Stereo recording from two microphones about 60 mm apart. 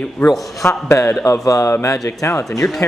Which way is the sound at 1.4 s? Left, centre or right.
Left.